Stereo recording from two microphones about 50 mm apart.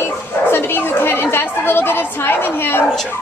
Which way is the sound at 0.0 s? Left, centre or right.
Left.